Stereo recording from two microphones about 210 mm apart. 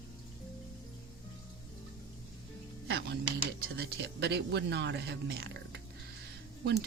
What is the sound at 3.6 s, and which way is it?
Speech, 50° right (ahead or behind).